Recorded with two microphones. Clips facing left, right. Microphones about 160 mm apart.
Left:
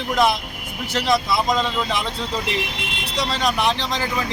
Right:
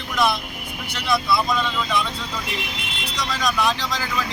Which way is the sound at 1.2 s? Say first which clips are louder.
Left 1 dB; 40° left (ahead or behind).